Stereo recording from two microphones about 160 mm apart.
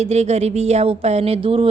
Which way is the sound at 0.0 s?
40° right (ahead or behind).